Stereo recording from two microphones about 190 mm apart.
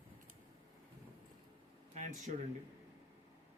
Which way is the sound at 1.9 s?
40° right (ahead or behind).